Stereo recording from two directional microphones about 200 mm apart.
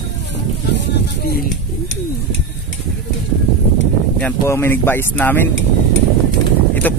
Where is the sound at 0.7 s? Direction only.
50° left (ahead or behind).